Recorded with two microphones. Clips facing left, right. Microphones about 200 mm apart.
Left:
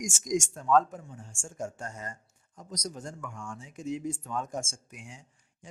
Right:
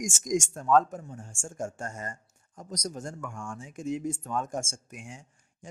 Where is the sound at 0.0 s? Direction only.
45° right (ahead or behind).